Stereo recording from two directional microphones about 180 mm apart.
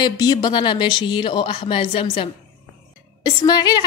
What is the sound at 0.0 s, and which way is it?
A woman's voice, 25° left (ahead or behind).